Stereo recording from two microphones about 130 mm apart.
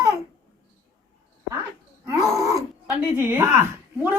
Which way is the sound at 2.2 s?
25° right (ahead or behind).